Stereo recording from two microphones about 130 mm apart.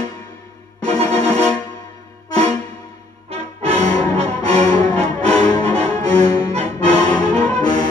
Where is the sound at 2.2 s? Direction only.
30° left (ahead or behind).